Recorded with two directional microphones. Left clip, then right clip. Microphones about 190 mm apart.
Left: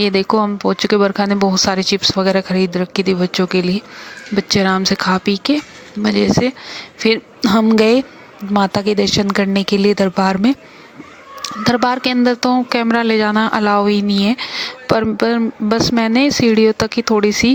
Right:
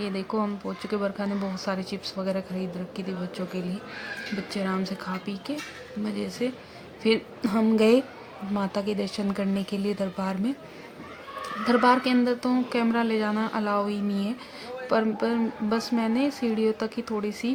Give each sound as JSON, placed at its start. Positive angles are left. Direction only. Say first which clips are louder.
{"t": 0.0, "sound": "speech", "louder": "left 15 dB", "side_deg": 45}